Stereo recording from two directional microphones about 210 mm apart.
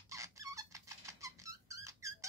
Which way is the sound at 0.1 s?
15° right (ahead or behind).